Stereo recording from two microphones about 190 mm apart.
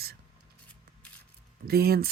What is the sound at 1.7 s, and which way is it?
Speech, 55° right (ahead or behind).